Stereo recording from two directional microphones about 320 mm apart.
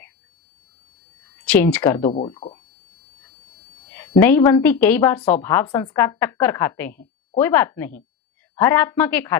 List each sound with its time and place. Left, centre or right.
1.5 s a woman's voice: centre
2.1 s a woman's voice: centre
3.9 s a woman's voice: centre